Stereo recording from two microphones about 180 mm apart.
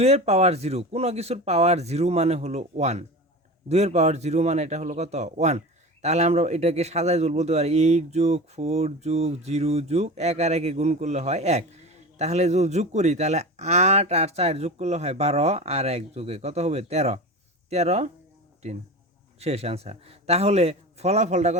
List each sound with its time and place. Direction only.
0.0 s a man's voice: 35° right (ahead or behind)
19.4 s a man's voice: 35° right (ahead or behind)